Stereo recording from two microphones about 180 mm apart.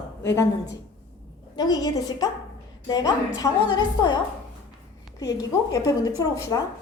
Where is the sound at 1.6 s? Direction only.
20° left (ahead or behind).